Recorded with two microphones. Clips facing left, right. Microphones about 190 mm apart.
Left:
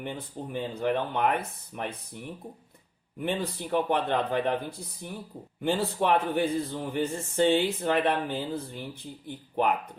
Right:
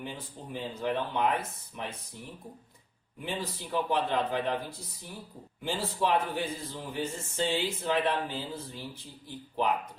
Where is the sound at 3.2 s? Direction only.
60° left (ahead or behind).